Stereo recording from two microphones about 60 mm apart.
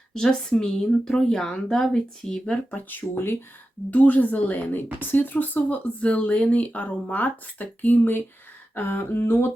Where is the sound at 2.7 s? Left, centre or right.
Left.